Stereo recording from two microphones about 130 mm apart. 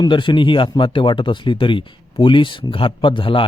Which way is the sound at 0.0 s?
40° left (ahead or behind).